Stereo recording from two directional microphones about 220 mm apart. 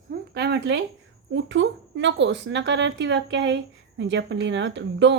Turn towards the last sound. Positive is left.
turn(degrees=-55)  # may be behind; listen again after turning